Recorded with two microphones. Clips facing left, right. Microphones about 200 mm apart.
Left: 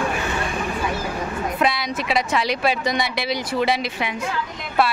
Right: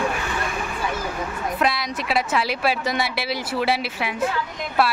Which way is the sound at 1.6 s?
Centre (ahead or behind).